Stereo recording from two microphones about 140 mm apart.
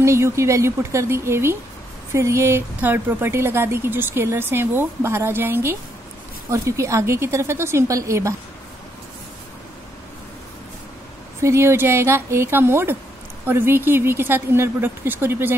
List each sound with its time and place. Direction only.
0.0 s a woman's voice: 20° right (ahead or behind)
11.4 s a woman's voice: 20° right (ahead or behind)